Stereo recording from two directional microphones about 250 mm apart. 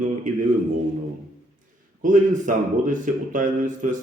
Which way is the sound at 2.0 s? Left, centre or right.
Right.